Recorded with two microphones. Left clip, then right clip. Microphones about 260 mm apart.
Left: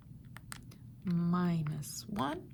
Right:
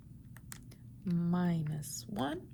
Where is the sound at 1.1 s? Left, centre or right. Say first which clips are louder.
Left 1 dB; left.